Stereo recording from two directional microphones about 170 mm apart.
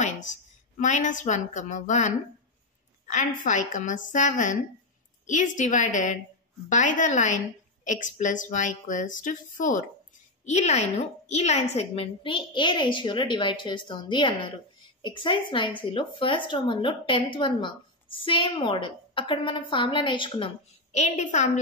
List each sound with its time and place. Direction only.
0.0 s a woman's voice: 45° left (ahead or behind)